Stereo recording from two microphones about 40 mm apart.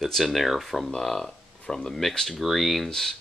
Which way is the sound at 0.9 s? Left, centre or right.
Centre.